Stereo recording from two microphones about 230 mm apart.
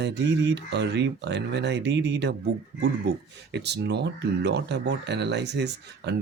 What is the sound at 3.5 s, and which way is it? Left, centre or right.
Speech, right.